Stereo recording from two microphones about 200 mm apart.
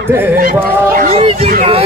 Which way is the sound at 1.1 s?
30° right (ahead or behind).